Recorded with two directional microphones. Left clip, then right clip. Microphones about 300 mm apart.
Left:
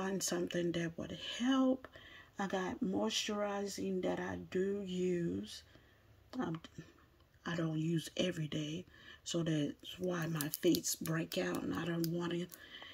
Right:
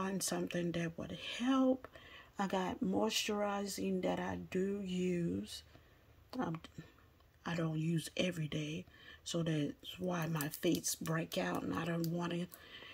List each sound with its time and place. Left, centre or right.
0.0 s speech: centre